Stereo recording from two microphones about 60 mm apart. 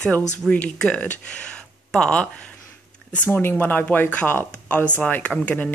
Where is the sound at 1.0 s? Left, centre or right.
Left.